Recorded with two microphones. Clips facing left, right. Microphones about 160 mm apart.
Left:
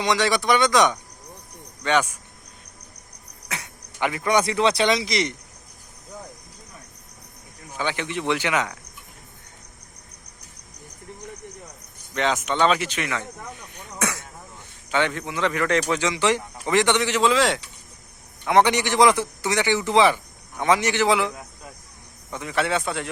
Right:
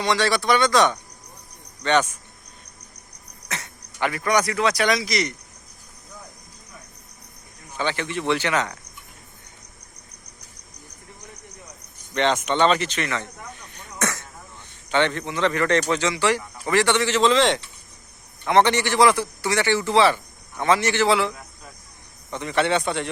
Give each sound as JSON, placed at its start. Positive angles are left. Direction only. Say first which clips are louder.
{"t": 0.0, "sound": "speech", "louder": "even", "side_deg": 15}
{"t": 3.5, "sound": "speech", "louder": "right 1 dB", "side_deg": 15}
{"t": 7.8, "sound": "speech", "louder": "right 1 dB", "side_deg": 15}
{"t": 12.1, "sound": "speech", "louder": "right 2 dB", "side_deg": 0}
{"t": 13.7, "sound": "throat clearing", "louder": "right 1 dB", "side_deg": 10}
{"t": 14.8, "sound": "speech", "louder": "right 2 dB", "side_deg": 5}
{"t": 22.3, "sound": "speech", "louder": "right 3 dB", "side_deg": 5}